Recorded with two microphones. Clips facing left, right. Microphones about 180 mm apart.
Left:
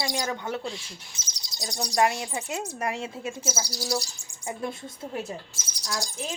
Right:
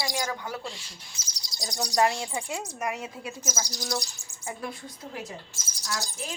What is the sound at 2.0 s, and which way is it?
Speech, 15° left (ahead or behind).